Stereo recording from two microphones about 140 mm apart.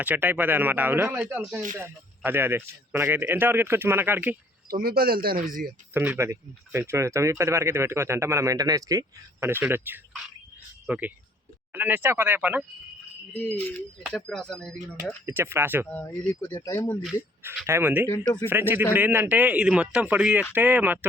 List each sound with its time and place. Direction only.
0.0 s a man's voice: 10° right (ahead or behind)
4.7 s speech: 90° right
5.9 s a man's voice: 15° right (ahead or behind)
13.3 s speech: 10° left (ahead or behind)
15.3 s a man's voice: 15° right (ahead or behind)
15.9 s speech: 10° left (ahead or behind)
17.7 s a man's voice: 15° right (ahead or behind)